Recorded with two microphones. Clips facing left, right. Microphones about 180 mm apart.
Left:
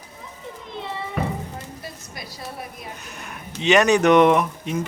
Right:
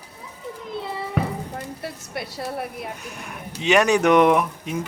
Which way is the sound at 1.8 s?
65° right (ahead or behind).